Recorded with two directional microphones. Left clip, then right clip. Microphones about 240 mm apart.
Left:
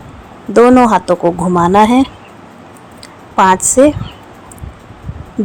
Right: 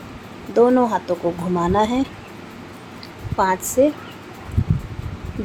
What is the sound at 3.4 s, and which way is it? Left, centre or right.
Speech, left.